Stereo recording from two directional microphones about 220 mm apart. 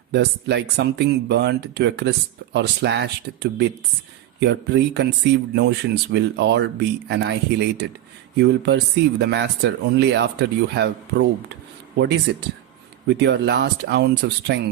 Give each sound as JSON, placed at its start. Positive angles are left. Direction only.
{"t": 0.1, "sound": "speech", "side_deg": -50}
{"t": 12.3, "sound": "speech", "side_deg": -50}